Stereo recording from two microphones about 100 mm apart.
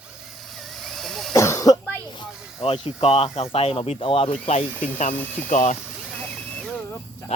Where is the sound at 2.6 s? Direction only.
65° left (ahead or behind).